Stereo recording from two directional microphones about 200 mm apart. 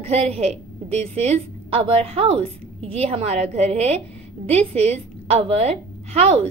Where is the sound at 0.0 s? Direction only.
30° right (ahead or behind).